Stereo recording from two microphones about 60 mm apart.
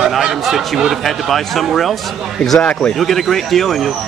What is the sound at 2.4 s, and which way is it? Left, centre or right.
Speech, centre.